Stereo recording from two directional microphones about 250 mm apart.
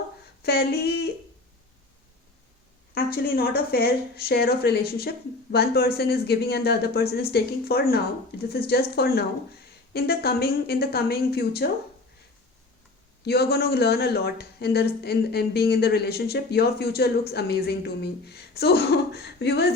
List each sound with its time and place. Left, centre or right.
0.4 s speech: left
2.9 s speech: left
13.2 s speech: left